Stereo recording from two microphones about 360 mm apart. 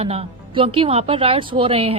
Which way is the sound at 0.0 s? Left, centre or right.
Centre.